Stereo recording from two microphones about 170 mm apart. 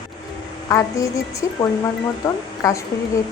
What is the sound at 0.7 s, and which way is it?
A woman's voice, 20° left (ahead or behind).